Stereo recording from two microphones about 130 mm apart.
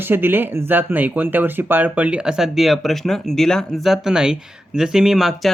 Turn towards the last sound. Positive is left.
turn(degrees=0)  # may be behind; listen again after turning